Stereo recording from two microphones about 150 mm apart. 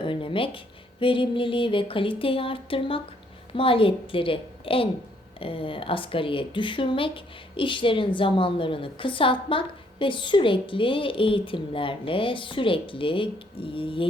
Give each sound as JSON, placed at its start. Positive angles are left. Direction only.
{"t": 0.0, "sound": "a woman's voice", "side_deg": 35}